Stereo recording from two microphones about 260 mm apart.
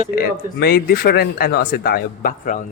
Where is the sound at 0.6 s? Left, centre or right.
Left.